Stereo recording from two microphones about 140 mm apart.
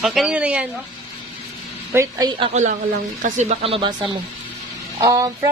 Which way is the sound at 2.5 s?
55° right (ahead or behind).